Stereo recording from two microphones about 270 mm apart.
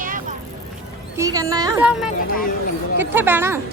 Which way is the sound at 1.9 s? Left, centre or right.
Centre.